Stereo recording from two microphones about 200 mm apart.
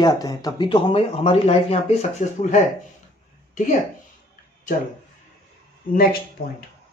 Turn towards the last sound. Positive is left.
turn(degrees=45)  # may be behind; listen again after turning